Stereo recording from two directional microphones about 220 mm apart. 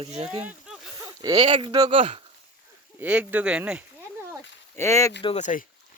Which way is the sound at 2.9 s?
5° right (ahead or behind).